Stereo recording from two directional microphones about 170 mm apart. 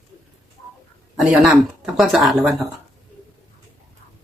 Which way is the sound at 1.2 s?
5° right (ahead or behind).